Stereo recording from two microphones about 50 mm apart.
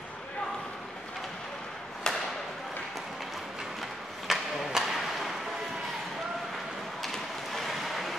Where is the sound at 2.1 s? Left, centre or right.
Centre.